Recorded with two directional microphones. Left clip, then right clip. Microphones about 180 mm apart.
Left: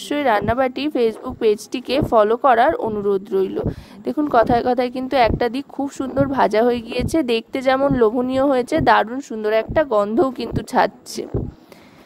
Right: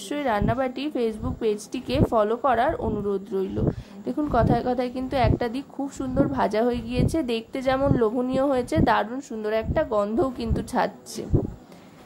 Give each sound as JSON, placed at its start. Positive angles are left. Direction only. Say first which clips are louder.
{"t": 0.1, "sound": "a woman's voice", "louder": "left 7 dB", "side_deg": 45}